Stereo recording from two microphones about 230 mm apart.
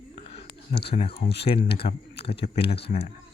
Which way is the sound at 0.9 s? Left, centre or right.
Left.